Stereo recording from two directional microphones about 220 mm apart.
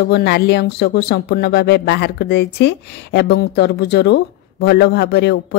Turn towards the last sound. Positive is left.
turn(degrees=50)  # may be behind; listen again after turning